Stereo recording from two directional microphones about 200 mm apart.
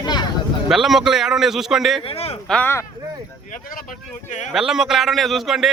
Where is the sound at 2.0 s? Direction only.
30° left (ahead or behind).